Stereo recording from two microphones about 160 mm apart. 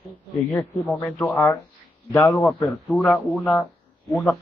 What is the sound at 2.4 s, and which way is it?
A man's voice, centre (ahead or behind).